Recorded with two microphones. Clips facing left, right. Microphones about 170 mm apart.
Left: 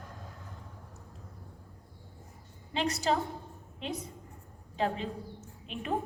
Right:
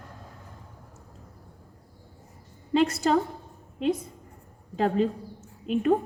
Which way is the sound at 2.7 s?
55° right (ahead or behind).